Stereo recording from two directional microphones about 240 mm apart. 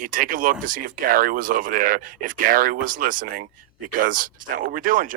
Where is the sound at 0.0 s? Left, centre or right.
Right.